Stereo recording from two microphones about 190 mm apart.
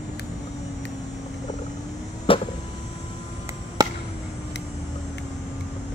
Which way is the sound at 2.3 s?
30° left (ahead or behind).